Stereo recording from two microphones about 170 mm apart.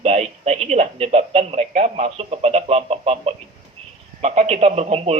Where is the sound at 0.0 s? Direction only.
40° right (ahead or behind).